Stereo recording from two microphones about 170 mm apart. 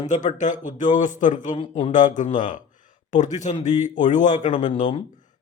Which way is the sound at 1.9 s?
50° left (ahead or behind).